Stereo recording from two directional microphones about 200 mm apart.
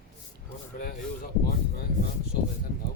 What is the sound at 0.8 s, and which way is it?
Speech, 45° left (ahead or behind).